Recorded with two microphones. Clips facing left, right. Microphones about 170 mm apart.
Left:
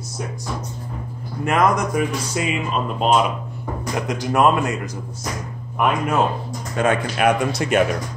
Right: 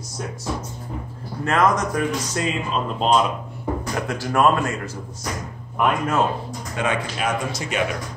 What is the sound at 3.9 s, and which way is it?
Speech, 20° left (ahead or behind).